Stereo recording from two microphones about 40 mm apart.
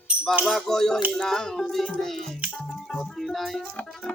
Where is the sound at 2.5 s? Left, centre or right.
Left.